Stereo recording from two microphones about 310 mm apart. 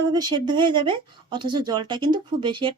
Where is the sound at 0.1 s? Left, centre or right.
Centre.